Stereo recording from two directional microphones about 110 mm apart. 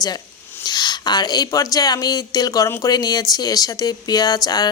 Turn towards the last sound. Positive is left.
turn(degrees=35)  # may be behind; listen again after turning